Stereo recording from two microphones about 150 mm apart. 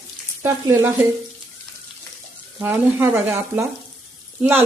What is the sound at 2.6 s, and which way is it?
Speech, 15° right (ahead or behind).